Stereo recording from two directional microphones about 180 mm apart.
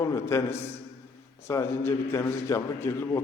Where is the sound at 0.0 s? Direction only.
15° left (ahead or behind).